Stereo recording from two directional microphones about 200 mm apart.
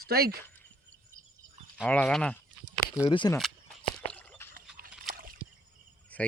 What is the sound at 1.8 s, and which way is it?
Speech, 5° left (ahead or behind).